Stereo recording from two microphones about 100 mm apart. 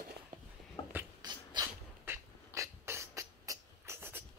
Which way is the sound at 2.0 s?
30° right (ahead or behind).